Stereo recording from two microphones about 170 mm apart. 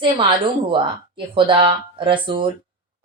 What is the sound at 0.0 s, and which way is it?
A woman's voice, 30° right (ahead or behind).